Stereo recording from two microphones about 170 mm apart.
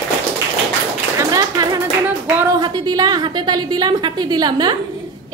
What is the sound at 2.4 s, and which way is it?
A woman's voice, 25° right (ahead or behind).